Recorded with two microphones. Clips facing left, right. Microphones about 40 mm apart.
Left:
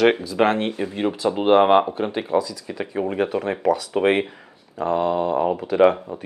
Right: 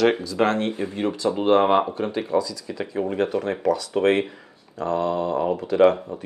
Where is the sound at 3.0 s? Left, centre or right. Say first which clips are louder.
Left 1 dB; centre.